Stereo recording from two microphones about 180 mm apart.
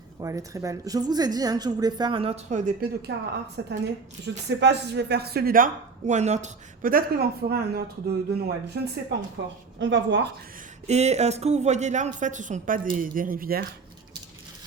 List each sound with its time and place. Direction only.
0.2 s a woman's voice: 20° right (ahead or behind); by 2.7 s 40° right (ahead or behind)
3.1 s speech: 70° right (ahead or behind)
3.6 s speech: 80° right
4.6 s speech: 70° right (ahead or behind)
9.4 s speech: 75° right (ahead or behind)
10.8 s speech: 35° right (ahead or behind); by 13.7 s 55° right (ahead or behind)